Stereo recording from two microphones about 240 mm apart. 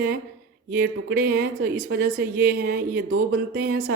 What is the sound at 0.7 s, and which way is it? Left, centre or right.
Speech, right.